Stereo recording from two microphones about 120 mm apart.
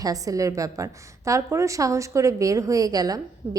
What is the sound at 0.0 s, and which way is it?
A woman's voice, 30° right (ahead or behind).